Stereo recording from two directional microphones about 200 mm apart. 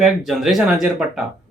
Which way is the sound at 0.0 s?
Centre (ahead or behind).